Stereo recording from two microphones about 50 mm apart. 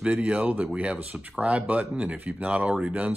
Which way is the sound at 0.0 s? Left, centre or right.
Right.